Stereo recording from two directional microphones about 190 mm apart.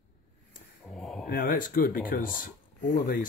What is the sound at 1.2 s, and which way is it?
Speech, 55° left (ahead or behind).